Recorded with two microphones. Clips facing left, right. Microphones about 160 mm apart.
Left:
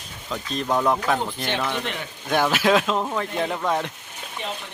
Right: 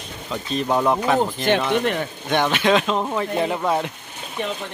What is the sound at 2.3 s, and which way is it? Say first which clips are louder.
Speech: right 1 dB; 5° left (ahead or behind).